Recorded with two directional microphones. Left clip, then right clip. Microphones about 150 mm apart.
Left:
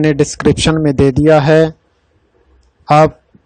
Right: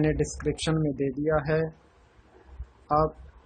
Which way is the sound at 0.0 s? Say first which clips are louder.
Left 15 dB; 70° left (ahead or behind).